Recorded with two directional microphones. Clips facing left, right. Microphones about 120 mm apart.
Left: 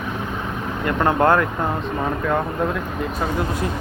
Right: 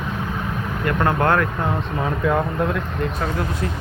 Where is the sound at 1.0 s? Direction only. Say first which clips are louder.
Left 3 dB; 20° left (ahead or behind).